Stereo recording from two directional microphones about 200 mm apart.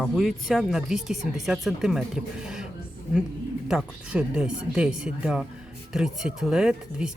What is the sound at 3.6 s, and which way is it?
Speech, 5° right (ahead or behind).